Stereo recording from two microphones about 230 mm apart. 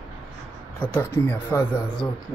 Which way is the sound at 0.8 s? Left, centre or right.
Centre.